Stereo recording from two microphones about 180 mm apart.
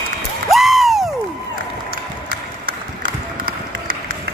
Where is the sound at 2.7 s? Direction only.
55° right (ahead or behind).